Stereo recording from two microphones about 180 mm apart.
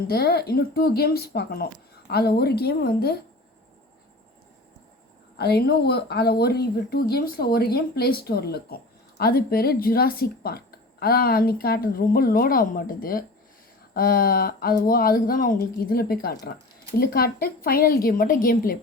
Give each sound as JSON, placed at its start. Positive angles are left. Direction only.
{"t": 0.1, "sound": "a woman's voice", "side_deg": 60}
{"t": 5.4, "sound": "a woman's voice", "side_deg": 60}